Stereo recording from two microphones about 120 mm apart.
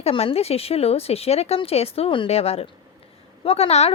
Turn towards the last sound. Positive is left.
turn(degrees=60)  # may be behind; listen again after turning